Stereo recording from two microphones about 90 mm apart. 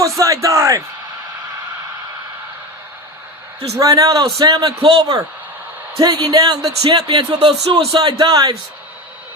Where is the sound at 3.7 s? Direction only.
40° right (ahead or behind).